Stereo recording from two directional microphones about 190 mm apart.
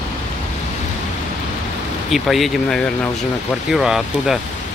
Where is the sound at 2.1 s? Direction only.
Centre (ahead or behind).